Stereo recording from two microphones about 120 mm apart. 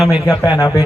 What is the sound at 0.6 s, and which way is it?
Speech, 35° left (ahead or behind).